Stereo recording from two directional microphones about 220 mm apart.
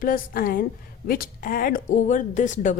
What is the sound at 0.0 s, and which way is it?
Speech, 40° left (ahead or behind).